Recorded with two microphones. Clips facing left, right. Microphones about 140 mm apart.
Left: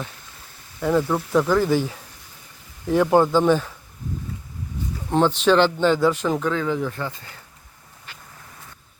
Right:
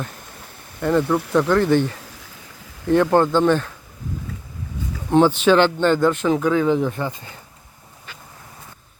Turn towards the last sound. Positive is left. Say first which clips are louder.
# right 4 dB
turn(degrees=-20)  # may be behind; listen again after turning